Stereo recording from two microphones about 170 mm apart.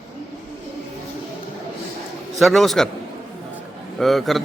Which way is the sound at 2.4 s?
Centre (ahead or behind).